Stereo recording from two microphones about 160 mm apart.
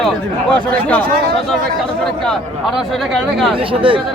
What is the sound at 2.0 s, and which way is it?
Speech, 5° left (ahead or behind).